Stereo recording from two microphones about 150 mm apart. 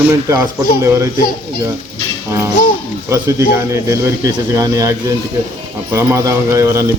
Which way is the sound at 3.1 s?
20° right (ahead or behind).